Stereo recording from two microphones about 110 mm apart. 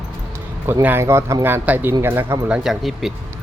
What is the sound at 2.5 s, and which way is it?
Speech, 5° right (ahead or behind).